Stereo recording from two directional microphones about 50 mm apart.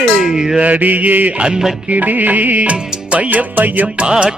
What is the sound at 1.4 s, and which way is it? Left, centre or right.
Music, centre.